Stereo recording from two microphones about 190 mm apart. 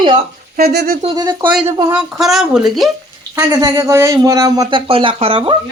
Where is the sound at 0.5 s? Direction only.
55° right (ahead or behind).